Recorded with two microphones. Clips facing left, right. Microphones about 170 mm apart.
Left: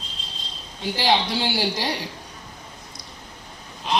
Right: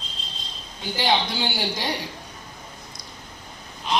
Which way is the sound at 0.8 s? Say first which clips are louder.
Left 2 dB; 30° left (ahead or behind).